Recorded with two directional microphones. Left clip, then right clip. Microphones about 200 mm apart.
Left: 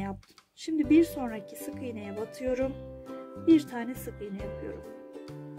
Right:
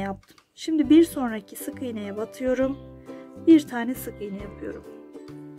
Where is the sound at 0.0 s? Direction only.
10° right (ahead or behind).